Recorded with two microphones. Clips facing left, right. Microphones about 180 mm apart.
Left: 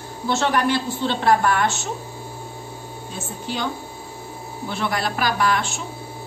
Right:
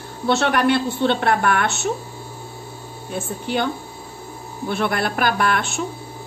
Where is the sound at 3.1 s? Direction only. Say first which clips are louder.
Right 6 dB; 60° right (ahead or behind).